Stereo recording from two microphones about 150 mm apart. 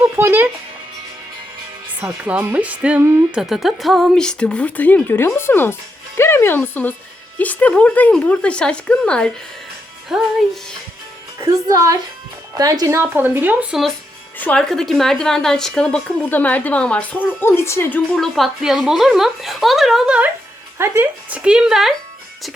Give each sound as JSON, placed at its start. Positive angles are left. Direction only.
{"t": 0.0, "sound": "music", "side_deg": -15}
{"t": 2.0, "sound": "a woman's voice", "side_deg": -10}
{"t": 11.3, "sound": "a woman's voice", "side_deg": -20}
{"t": 14.3, "sound": "speech", "side_deg": 10}